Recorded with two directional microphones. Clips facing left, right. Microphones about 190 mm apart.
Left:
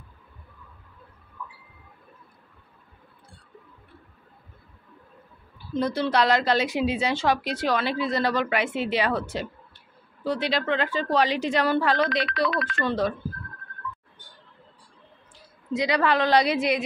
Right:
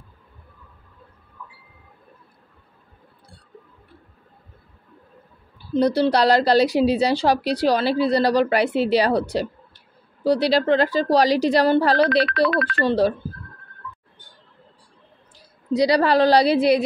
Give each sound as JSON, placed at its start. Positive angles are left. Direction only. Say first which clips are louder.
{"t": 5.7, "sound": "speech", "louder": "right 7 dB", "side_deg": -35}
{"t": 12.3, "sound": "speech", "louder": "right 6 dB", "side_deg": -55}
{"t": 12.7, "sound": "speech", "louder": "right 6 dB", "side_deg": -35}
{"t": 15.7, "sound": "speech", "louder": "right 6 dB", "side_deg": -35}